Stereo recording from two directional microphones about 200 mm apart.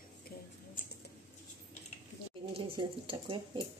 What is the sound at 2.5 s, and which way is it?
Speech, 25° right (ahead or behind).